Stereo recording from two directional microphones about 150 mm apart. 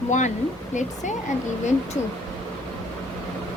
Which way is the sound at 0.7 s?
55° left (ahead or behind).